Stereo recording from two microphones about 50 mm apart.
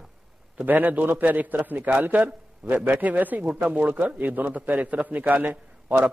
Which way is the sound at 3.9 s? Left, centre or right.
Right.